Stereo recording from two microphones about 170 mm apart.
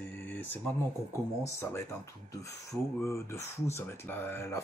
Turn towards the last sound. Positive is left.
turn(degrees=15)  # may be behind; listen again after turning